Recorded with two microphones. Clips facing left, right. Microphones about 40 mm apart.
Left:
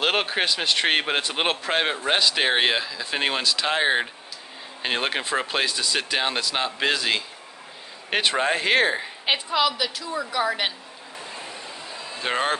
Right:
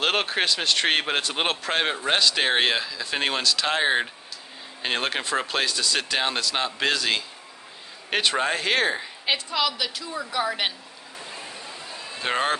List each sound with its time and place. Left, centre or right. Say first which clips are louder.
0.0 s a man's voice: left 1 dB; centre
9.9 s a woman's voice: left 2 dB; centre
11.1 s vehicle: left 1 dB; centre
11.8 s a sound: even; centre